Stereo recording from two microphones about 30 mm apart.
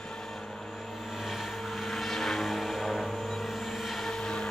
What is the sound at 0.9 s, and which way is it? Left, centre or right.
Vehicle, centre.